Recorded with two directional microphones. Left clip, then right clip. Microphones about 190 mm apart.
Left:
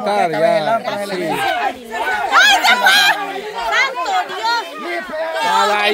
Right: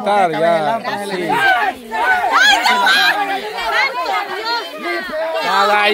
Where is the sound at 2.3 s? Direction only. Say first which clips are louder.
Left 3 dB; 40° left (ahead or behind).